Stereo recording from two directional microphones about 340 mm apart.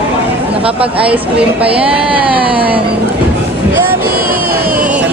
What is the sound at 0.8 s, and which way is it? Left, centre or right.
Speech, centre.